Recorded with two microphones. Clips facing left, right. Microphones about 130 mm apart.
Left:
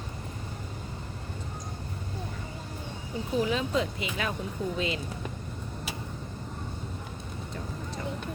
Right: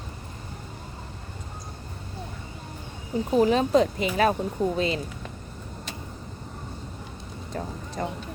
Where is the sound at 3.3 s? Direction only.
40° right (ahead or behind).